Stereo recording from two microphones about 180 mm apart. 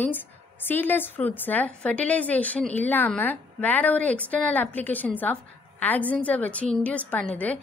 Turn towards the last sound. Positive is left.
turn(degrees=10)  # may be behind; listen again after turning